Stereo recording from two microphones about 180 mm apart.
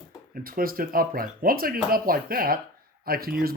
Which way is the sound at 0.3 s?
55° right (ahead or behind).